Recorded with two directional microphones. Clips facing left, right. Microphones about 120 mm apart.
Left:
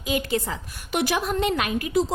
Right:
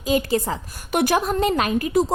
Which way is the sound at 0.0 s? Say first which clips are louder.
Right 5 dB; 35° right (ahead or behind).